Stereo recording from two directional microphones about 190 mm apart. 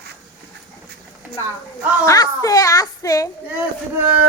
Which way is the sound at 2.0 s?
20° left (ahead or behind).